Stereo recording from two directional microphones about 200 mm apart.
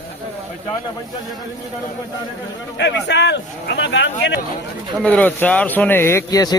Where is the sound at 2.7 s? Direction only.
60° left (ahead or behind).